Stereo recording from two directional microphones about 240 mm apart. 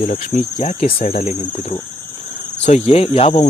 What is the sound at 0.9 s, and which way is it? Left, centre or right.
Speech, left.